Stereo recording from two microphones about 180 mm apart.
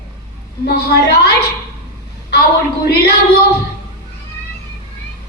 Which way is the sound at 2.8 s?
65° left (ahead or behind).